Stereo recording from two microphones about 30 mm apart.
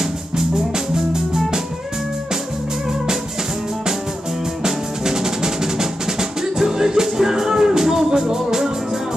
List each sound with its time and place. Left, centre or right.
0.9 s music: centre
4.6 s music: centre